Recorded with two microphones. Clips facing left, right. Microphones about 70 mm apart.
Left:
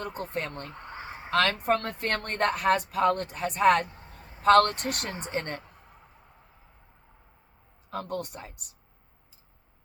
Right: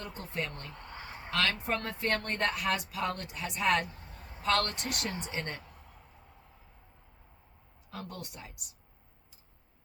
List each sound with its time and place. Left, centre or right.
0.0 s a woman's voice: left
0.8 s fowl: left
1.3 s a woman's voice: left
7.9 s a woman's voice: left